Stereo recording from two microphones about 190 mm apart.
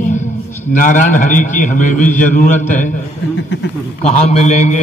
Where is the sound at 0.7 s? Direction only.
45° left (ahead or behind).